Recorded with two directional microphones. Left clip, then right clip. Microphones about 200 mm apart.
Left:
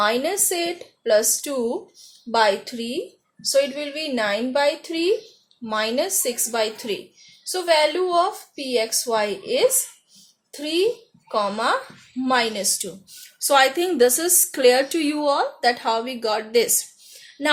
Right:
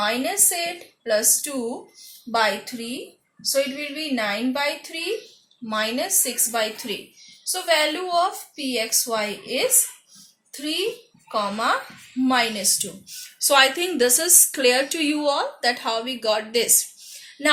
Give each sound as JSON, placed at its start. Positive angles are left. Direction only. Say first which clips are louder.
{"t": 0.0, "sound": "a woman's voice", "louder": "left 2 dB", "side_deg": 55}
{"t": 2.6, "sound": "a woman's voice", "louder": "left 4 dB", "side_deg": 50}